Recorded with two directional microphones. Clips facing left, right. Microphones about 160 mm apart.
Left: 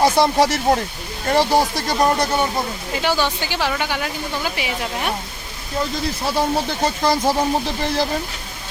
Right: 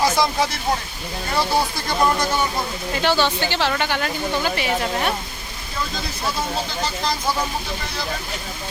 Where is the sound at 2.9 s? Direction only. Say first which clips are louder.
Right 1 dB; 10° left (ahead or behind).